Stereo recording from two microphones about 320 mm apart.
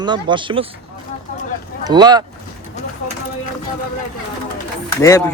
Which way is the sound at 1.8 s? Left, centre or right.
Centre.